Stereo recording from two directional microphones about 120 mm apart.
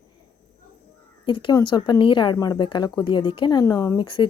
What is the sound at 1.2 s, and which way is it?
A woman's voice, 40° left (ahead or behind).